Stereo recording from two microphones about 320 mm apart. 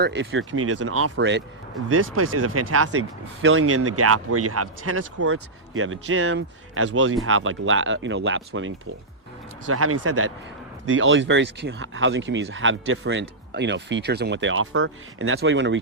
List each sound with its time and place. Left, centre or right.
0.0 s speech: right